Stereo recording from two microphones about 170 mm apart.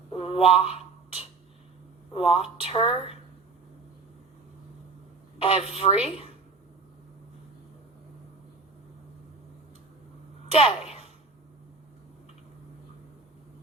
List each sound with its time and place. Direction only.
0.1 s a sound: 35° left (ahead or behind)
2.1 s speech: 35° left (ahead or behind)
5.4 s speech: 35° left (ahead or behind)
10.5 s speech: 35° left (ahead or behind)